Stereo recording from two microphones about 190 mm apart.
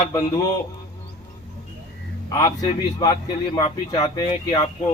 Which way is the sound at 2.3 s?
20° left (ahead or behind).